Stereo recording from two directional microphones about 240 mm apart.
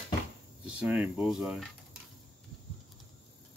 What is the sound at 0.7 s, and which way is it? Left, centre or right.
Speech, centre.